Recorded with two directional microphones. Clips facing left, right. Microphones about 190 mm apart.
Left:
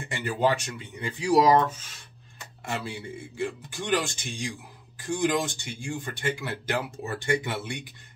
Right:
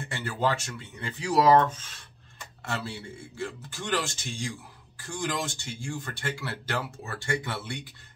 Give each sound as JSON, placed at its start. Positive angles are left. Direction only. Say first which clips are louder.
{"t": 0.1, "sound": "speech", "louder": "left 3 dB", "side_deg": 15}